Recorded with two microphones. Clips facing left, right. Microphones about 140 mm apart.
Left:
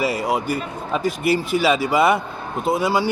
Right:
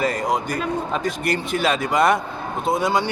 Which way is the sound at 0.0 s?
5° left (ahead or behind).